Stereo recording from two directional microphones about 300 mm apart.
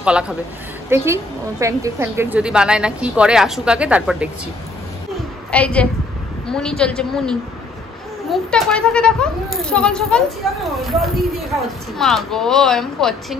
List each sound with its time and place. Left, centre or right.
0.0 s a woman's voice: centre
5.5 s a woman's voice: centre
8.3 s a woman's voice: centre